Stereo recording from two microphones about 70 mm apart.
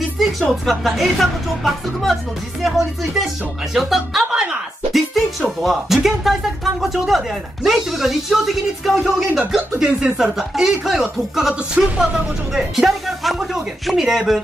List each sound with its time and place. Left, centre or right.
0.2 s speech: centre
4.3 s a sound: centre
5.6 s speech: centre
9.8 s speech: centre
10.1 s speech: centre